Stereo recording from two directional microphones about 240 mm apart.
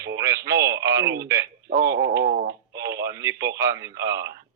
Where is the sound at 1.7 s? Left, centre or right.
Right.